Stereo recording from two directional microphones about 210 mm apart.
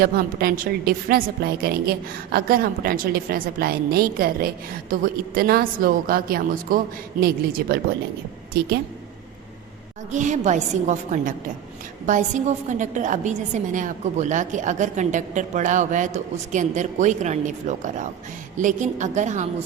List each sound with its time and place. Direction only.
0.0 s a woman's voice: 45° right (ahead or behind)
10.1 s a woman's voice: 35° right (ahead or behind)